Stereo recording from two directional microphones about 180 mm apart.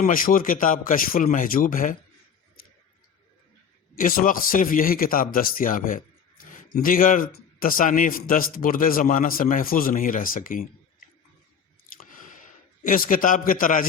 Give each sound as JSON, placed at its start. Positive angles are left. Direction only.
{"t": 0.0, "sound": "a man's voice", "side_deg": 50}
{"t": 3.9, "sound": "a man's voice", "side_deg": 50}
{"t": 11.9, "sound": "chewing", "side_deg": 45}
{"t": 12.8, "sound": "a man's voice", "side_deg": 50}